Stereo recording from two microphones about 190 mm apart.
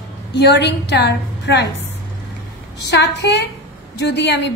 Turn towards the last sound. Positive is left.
turn(degrees=65)  # may be behind; listen again after turning